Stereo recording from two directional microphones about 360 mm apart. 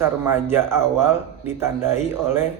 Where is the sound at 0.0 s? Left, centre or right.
Centre.